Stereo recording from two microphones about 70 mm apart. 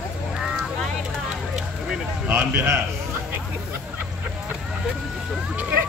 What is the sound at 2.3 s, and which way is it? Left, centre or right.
Speech, right.